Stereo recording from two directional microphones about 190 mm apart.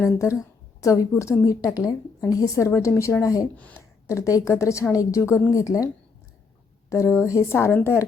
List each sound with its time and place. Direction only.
0.0 s a woman's voice: 15° left (ahead or behind)
6.9 s a woman's voice: 15° left (ahead or behind)